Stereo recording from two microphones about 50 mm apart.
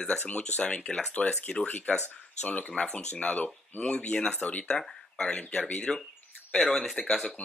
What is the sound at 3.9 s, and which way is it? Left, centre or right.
Speech, left.